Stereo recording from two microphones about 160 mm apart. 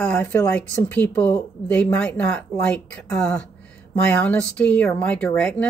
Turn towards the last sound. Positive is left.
turn(degrees=10)  # may be behind; listen again after turning